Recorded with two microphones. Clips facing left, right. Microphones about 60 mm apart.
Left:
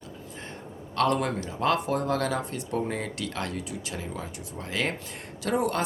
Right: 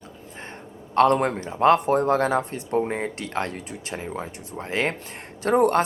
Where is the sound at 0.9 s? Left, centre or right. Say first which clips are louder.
Right 6 dB; right.